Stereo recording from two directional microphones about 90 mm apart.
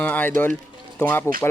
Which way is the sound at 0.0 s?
15° left (ahead or behind).